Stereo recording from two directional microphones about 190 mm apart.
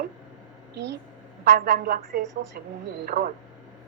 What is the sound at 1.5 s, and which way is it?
Speech, 55° right (ahead or behind).